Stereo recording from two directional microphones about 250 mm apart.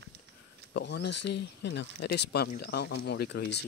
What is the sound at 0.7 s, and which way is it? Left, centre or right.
Speech, left.